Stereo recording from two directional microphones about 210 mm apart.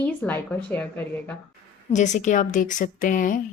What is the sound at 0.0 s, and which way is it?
A woman's voice, 5° left (ahead or behind).